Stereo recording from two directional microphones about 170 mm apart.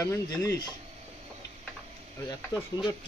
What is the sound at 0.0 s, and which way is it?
Speech, 15° left (ahead or behind).